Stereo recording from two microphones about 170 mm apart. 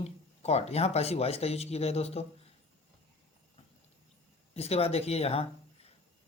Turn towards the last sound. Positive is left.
turn(degrees=35)  # may be behind; listen again after turning